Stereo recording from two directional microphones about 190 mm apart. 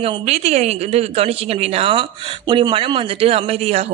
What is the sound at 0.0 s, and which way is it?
Speech, 30° right (ahead or behind).